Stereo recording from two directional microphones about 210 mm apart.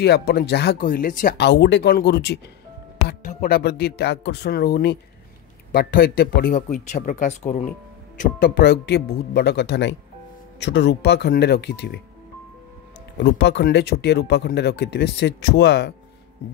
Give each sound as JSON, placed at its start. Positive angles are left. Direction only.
{"t": 0.0, "sound": "speech", "side_deg": 50}
{"t": 3.1, "sound": "speech", "side_deg": 35}
{"t": 8.2, "sound": "speech", "side_deg": 45}
{"t": 13.2, "sound": "speech", "side_deg": 55}